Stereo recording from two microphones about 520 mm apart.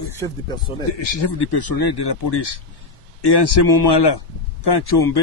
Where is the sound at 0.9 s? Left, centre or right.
Left.